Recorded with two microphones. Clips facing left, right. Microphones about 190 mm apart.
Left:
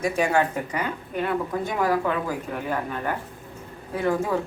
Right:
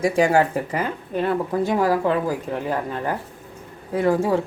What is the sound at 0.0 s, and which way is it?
Speech, 30° right (ahead or behind).